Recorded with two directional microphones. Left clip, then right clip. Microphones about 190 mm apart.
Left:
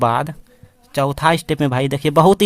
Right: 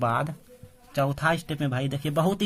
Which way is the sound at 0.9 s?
50° left (ahead or behind).